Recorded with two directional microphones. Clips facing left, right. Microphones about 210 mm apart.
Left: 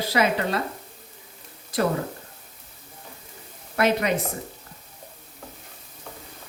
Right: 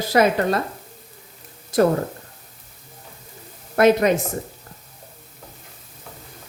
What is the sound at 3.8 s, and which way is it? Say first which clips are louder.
Speech: right 7 dB; 45° right (ahead or behind).